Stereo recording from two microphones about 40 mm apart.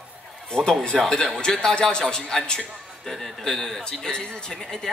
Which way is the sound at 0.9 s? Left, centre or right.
Centre.